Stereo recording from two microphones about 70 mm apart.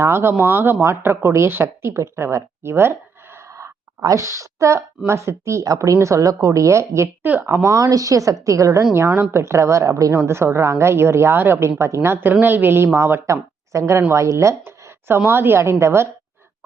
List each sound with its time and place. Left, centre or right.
0.0 s speech: right
4.0 s speech: right
8.9 s speech: right